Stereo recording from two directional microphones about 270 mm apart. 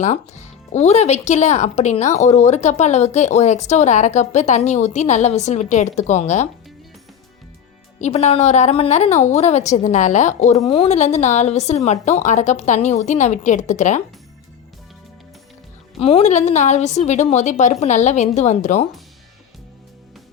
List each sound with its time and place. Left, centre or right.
0.0 s speech: left
8.0 s speech: left
16.0 s speech: left